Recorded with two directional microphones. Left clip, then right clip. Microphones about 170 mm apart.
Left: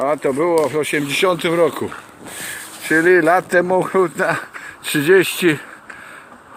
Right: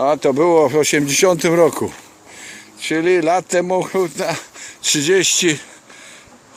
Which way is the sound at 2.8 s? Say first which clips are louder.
Left 3 dB; 15° right (ahead or behind).